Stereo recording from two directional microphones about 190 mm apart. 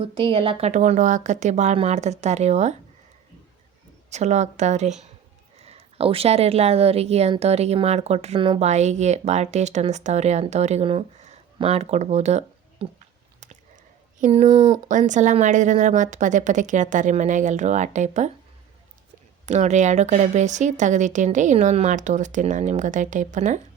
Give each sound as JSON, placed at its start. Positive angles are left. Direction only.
{"t": 0.0, "sound": "speech", "side_deg": -30}
{"t": 4.1, "sound": "speech", "side_deg": -35}
{"t": 14.2, "sound": "speech", "side_deg": -35}
{"t": 19.5, "sound": "speech", "side_deg": -40}